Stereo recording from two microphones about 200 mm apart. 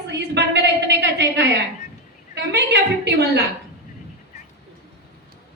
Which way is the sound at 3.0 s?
55° right (ahead or behind).